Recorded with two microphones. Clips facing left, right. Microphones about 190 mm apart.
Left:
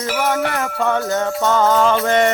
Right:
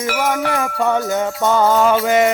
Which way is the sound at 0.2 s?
10° right (ahead or behind).